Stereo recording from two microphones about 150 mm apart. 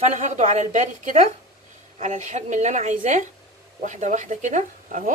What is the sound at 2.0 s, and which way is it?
Speech, 55° right (ahead or behind).